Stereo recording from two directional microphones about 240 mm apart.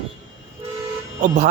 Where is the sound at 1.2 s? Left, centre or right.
Right.